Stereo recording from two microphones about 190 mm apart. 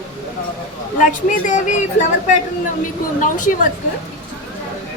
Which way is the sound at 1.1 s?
40° left (ahead or behind).